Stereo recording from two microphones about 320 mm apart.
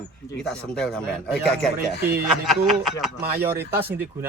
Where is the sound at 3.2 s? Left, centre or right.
Right.